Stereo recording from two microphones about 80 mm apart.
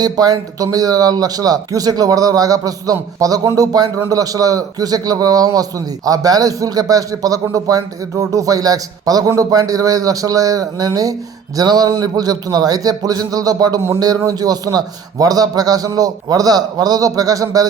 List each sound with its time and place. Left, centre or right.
0.0 s a man's voice: right